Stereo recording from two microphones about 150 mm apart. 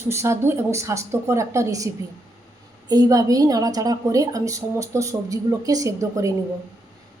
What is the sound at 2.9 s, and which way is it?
A woman's voice, 25° right (ahead or behind).